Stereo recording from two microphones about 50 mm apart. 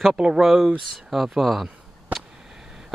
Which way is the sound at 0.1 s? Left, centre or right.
Centre.